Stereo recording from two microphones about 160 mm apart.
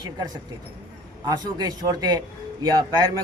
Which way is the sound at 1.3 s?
25° right (ahead or behind).